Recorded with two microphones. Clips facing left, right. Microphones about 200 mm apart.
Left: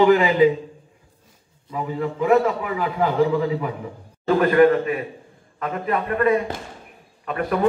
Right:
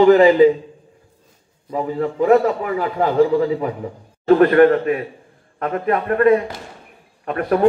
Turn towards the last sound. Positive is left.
turn(degrees=-45)  # may be behind; listen again after turning